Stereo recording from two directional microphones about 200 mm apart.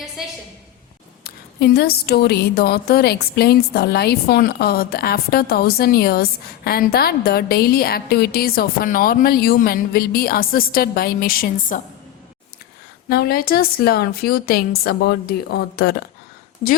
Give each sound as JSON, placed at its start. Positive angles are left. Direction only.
{"t": 1.2, "sound": "a woman's voice", "side_deg": 50}
{"t": 13.1, "sound": "a woman's voice", "side_deg": 50}